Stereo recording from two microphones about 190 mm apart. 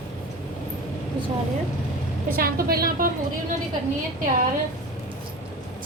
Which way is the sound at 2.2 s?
50° right (ahead or behind).